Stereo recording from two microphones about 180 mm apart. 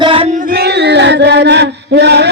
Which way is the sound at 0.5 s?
65° right (ahead or behind).